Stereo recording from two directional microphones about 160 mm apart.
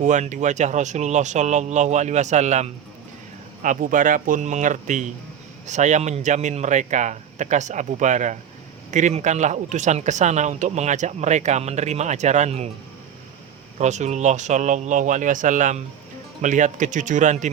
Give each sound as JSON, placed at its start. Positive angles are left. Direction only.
{"t": 0.0, "sound": "speech", "side_deg": -50}
{"t": 13.7, "sound": "speech", "side_deg": -45}